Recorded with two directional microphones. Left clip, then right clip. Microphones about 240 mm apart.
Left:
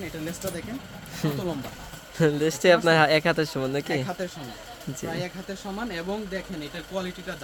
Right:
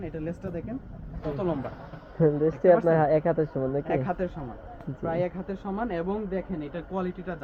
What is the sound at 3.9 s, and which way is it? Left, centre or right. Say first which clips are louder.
Speech: right 1 dB; centre.